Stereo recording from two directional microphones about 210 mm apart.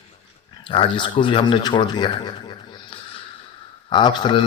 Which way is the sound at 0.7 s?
25° left (ahead or behind).